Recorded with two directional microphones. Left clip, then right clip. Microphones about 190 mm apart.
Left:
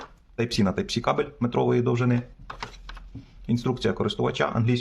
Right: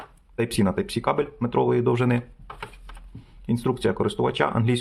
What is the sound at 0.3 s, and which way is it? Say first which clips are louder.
Speech: right 2 dB; 10° right (ahead or behind).